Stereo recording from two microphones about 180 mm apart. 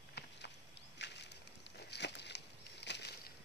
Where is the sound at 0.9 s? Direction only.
70° left (ahead or behind).